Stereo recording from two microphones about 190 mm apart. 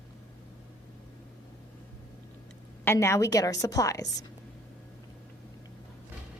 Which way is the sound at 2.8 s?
15° left (ahead or behind).